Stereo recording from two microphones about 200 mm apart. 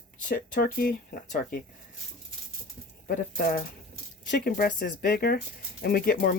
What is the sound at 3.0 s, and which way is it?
A woman's voice, 45° left (ahead or behind).